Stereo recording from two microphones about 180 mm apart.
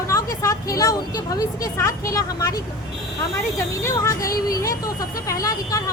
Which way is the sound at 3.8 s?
15° left (ahead or behind).